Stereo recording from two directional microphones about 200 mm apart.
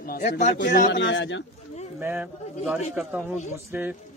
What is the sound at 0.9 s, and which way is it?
Speech, 65° left (ahead or behind).